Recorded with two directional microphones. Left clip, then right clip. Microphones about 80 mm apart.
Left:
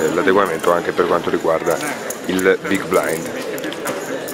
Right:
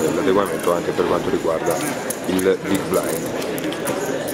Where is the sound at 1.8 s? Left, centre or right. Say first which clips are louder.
Even; left.